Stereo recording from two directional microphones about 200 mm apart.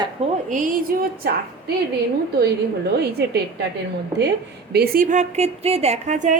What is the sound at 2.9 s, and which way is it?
Speech, 55° right (ahead or behind).